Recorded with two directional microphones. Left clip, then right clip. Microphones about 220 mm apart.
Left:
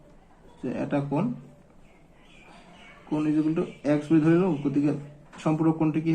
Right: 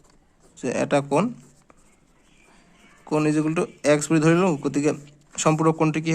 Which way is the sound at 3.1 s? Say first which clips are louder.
Right 4 dB; 55° right (ahead or behind).